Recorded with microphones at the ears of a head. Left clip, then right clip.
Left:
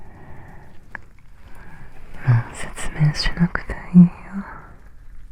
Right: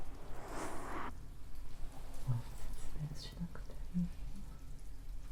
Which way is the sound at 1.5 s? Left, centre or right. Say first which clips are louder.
Left 18 dB; left.